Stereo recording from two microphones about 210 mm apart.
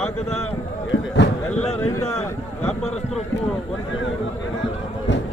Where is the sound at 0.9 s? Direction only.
55° left (ahead or behind).